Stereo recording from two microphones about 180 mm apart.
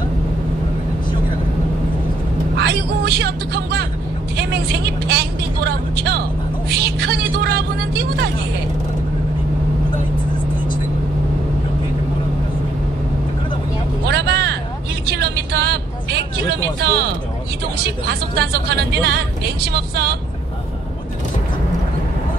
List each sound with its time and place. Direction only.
2.5 s vehicle: 65° right (ahead or behind)
4.4 s speech: 65° right (ahead or behind)
14.0 s vehicle: 65° right (ahead or behind)
17.7 s speech: 65° right (ahead or behind)